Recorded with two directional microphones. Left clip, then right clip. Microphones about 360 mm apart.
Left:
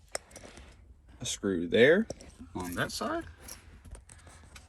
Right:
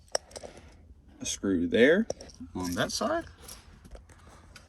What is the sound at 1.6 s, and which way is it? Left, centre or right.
Speech, centre.